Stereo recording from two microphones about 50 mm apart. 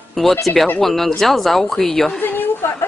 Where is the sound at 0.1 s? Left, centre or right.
Centre.